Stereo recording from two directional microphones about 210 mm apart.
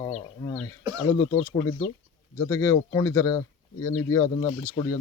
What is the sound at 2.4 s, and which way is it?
Speech, 15° left (ahead or behind).